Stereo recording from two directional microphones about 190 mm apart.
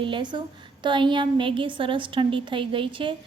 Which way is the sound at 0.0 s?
25° right (ahead or behind).